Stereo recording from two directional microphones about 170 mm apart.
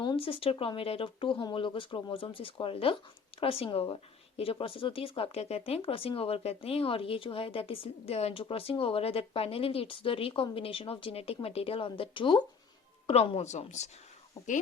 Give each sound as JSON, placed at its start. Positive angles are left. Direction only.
{"t": 0.0, "sound": "speech", "side_deg": 30}
{"t": 14.4, "sound": "speech", "side_deg": 20}